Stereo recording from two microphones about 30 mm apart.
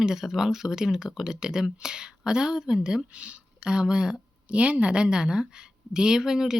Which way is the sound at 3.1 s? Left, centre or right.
Right.